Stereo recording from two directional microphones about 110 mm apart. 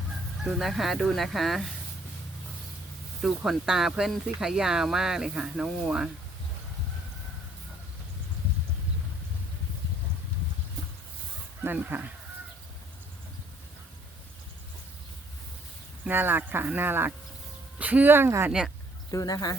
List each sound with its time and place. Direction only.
0.4 s speech: centre (ahead or behind)
3.2 s speech: 5° right (ahead or behind)
11.6 s speech: 15° right (ahead or behind)
16.0 s speech: 20° right (ahead or behind)
19.1 s speech: 35° left (ahead or behind)